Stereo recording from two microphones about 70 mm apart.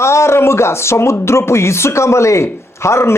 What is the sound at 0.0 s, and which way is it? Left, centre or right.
Speech, left.